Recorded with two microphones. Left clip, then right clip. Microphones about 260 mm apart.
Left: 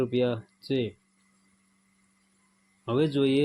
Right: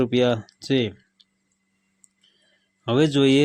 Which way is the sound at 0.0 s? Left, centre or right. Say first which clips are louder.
Right 6 dB; right.